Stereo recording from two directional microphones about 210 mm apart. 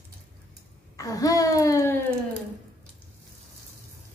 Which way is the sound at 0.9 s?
15° left (ahead or behind).